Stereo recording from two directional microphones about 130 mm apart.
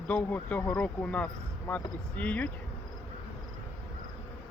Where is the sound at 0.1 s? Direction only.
10° left (ahead or behind).